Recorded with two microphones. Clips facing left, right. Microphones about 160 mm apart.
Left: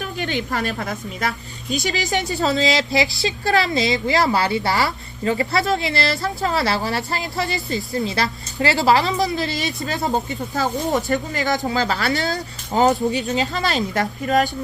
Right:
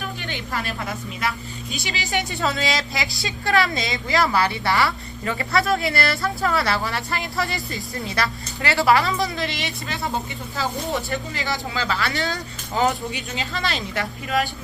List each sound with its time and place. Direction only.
0.2 s a woman's voice: 45° left (ahead or behind)